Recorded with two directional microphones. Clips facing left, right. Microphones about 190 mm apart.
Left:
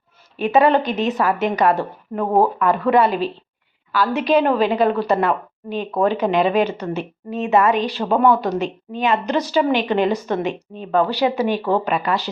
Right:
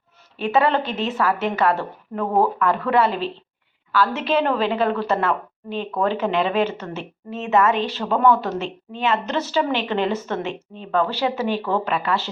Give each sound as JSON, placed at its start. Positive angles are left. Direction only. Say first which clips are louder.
{"t": 0.3, "sound": "a woman's voice", "louder": "left 4 dB", "side_deg": 15}